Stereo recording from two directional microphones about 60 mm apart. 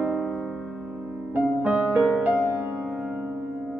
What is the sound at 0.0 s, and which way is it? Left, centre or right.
Music, centre.